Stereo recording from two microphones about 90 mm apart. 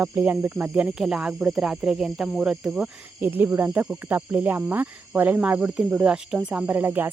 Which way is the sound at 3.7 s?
15° right (ahead or behind).